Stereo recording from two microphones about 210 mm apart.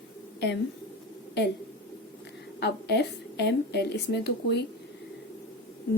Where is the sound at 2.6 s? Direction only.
55° left (ahead or behind).